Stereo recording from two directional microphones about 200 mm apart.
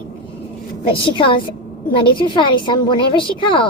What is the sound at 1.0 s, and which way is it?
A woman's voice, 25° left (ahead or behind).